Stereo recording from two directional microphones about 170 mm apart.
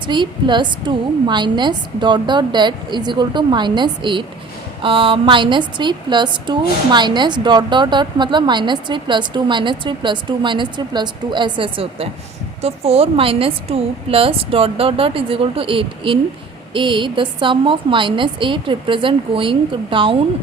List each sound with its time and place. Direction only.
0.1 s a woman's voice: 25° right (ahead or behind)